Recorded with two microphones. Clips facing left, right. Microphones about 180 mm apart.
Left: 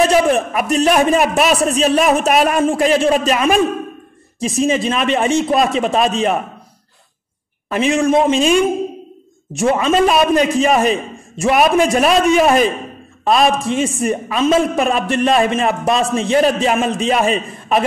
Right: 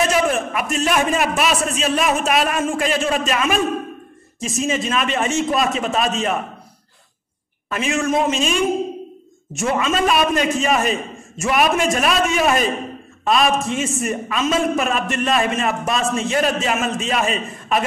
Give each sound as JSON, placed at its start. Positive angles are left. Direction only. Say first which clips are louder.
{"t": 0.1, "sound": "a man's voice", "louder": "left 5 dB", "side_deg": 35}
{"t": 7.7, "sound": "a man's voice", "louder": "left 6 dB", "side_deg": 35}